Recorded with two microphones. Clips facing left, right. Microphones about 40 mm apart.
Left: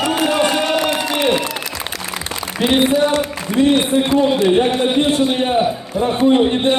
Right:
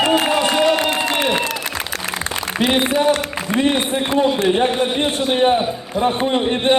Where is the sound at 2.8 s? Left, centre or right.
Right.